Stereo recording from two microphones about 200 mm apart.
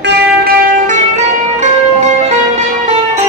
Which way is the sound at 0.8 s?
35° right (ahead or behind).